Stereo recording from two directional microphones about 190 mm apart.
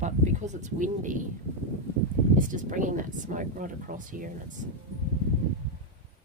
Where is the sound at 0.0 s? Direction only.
40° right (ahead or behind).